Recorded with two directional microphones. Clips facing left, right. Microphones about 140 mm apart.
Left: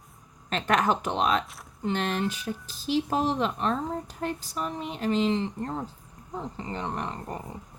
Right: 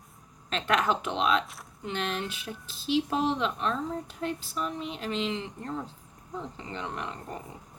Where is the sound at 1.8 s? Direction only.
45° left (ahead or behind).